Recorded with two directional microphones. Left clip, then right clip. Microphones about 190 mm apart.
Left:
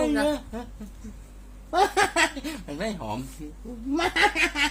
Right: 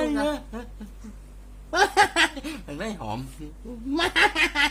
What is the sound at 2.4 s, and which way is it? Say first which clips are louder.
Dishes: left 1 dB; 10° left (ahead or behind).